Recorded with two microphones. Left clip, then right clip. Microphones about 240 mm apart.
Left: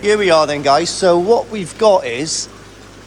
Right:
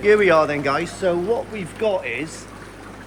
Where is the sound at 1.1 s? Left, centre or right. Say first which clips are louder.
Left 9 dB; left.